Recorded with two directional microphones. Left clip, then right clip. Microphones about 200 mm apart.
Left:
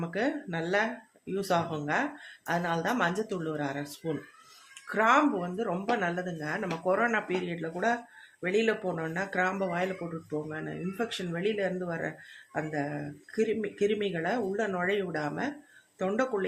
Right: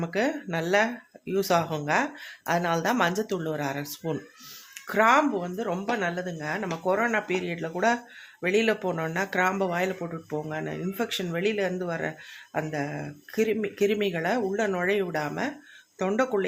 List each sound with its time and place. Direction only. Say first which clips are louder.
0.0 s speech: right 4 dB; 30° right (ahead or behind)